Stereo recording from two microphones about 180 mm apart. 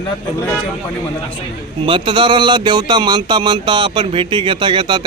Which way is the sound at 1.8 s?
30° right (ahead or behind).